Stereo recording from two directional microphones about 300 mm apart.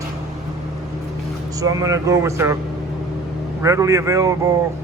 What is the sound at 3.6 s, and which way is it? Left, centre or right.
Speech, centre.